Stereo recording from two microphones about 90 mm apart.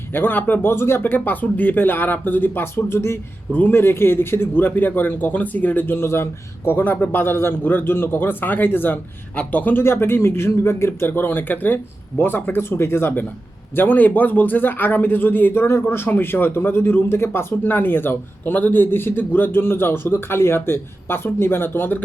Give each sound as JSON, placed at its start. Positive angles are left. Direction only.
{"t": 0.1, "sound": "a man's voice", "side_deg": 20}